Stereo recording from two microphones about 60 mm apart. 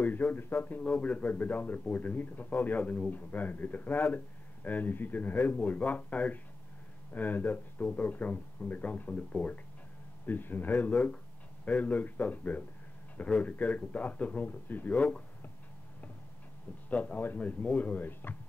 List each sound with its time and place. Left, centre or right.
0.0 s a man's voice: left
16.9 s a man's voice: left